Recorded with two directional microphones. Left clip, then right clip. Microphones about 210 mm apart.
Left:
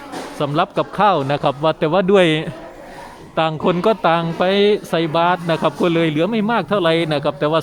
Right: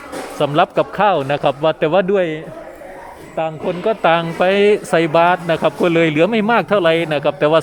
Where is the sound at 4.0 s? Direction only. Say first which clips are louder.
Right 2 dB; 5° left (ahead or behind).